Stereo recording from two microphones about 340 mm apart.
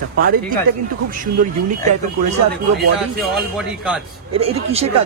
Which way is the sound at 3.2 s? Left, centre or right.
Centre.